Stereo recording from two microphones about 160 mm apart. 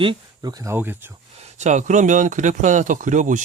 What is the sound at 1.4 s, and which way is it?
Speech, 45° right (ahead or behind).